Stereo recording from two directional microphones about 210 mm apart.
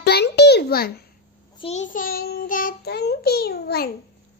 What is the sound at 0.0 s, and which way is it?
Babbling, 50° left (ahead or behind).